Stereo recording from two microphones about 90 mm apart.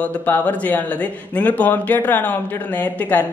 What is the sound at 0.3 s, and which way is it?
Speech, 20° left (ahead or behind).